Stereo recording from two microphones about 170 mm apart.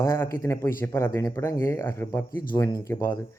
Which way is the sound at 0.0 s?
15° left (ahead or behind).